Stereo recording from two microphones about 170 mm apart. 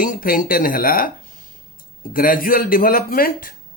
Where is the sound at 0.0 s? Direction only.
55° left (ahead or behind).